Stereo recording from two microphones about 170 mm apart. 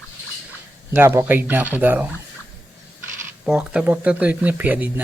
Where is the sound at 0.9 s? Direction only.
15° right (ahead or behind).